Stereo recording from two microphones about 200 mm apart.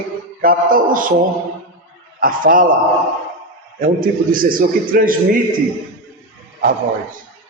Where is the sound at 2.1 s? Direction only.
45° right (ahead or behind).